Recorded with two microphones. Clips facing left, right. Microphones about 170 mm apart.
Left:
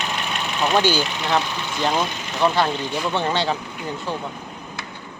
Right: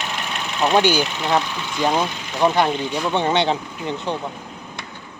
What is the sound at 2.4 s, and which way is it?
Speech, 15° right (ahead or behind).